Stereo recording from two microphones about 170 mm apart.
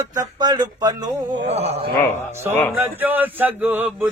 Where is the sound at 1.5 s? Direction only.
40° right (ahead or behind).